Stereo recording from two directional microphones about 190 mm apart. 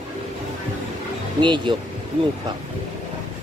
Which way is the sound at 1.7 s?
25° right (ahead or behind).